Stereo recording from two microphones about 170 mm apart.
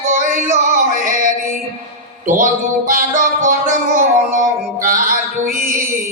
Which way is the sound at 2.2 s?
50° right (ahead or behind).